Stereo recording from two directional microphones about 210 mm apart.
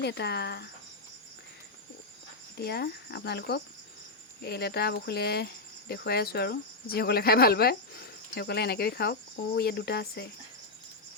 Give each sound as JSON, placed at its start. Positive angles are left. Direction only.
{"t": 0.0, "sound": "speech", "side_deg": 55}
{"t": 2.6, "sound": "speech", "side_deg": 50}